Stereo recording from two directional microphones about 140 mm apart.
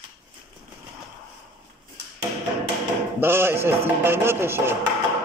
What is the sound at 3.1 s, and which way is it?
Speech, 15° right (ahead or behind).